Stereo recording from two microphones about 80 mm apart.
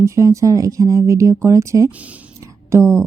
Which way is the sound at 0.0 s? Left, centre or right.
Right.